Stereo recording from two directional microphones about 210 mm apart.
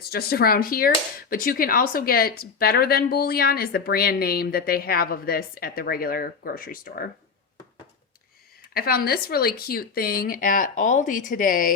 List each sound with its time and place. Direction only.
0.1 s a woman's voice: 45° left (ahead or behind)
8.7 s a woman's voice: 45° left (ahead or behind)